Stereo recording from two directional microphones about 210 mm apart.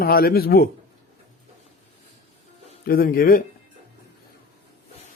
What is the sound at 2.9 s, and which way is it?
Speech, 45° left (ahead or behind).